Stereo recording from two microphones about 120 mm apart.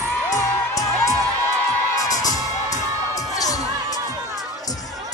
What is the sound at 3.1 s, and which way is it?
Crowd, 30° left (ahead or behind).